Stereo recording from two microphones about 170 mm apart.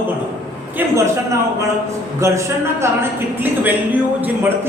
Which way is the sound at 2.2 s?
15° right (ahead or behind).